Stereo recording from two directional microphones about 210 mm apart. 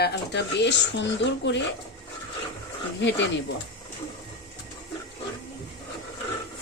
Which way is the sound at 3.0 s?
60° left (ahead or behind).